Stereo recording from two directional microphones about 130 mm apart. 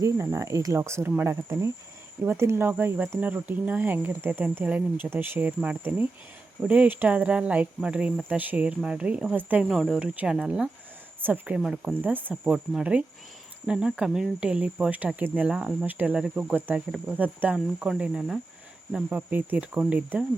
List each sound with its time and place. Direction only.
0.0 s speech: 20° right (ahead or behind)
9.6 s speech: centre (ahead or behind)